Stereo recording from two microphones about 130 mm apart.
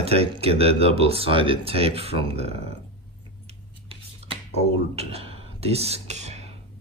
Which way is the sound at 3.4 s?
50° right (ahead or behind).